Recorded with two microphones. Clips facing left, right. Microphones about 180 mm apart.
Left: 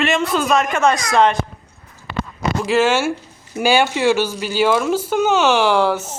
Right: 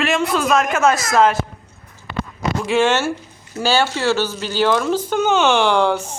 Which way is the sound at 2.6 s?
5° left (ahead or behind).